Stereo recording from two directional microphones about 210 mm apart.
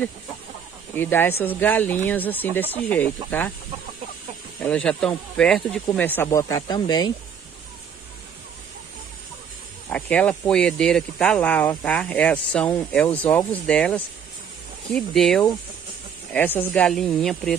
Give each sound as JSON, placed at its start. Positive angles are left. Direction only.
{"t": 0.9, "sound": "speech", "side_deg": 10}
{"t": 4.6, "sound": "speech", "side_deg": 5}
{"t": 9.8, "sound": "speech", "side_deg": 5}